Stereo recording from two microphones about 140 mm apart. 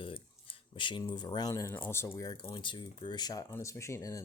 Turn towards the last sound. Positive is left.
turn(degrees=20)  # may be behind; listen again after turning